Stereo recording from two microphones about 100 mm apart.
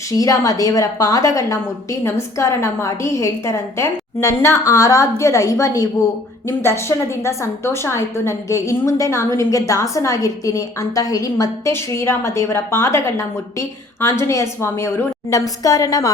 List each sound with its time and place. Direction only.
0.1 s a woman's voice: 35° left (ahead or behind)
11.7 s a woman's voice: 25° left (ahead or behind)